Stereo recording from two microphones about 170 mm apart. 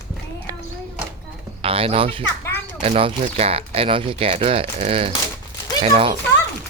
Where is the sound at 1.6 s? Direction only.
35° right (ahead or behind).